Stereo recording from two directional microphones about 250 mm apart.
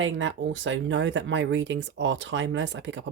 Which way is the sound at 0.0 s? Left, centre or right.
Right.